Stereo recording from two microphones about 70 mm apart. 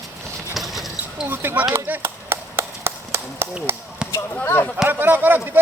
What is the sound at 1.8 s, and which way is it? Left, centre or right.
Clapping, right.